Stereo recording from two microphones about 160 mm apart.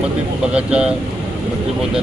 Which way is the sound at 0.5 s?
5° right (ahead or behind).